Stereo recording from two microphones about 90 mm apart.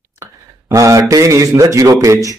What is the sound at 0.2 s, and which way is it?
A man's voice, 35° right (ahead or behind).